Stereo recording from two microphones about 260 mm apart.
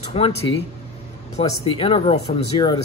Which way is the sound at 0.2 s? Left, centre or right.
Left.